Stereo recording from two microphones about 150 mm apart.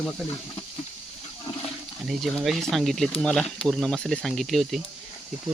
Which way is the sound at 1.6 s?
Centre (ahead or behind).